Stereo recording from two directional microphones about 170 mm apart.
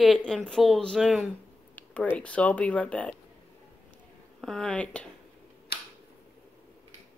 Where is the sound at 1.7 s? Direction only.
10° left (ahead or behind).